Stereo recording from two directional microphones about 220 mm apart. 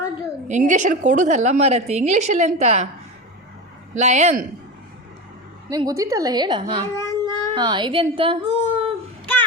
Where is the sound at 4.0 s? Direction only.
30° right (ahead or behind).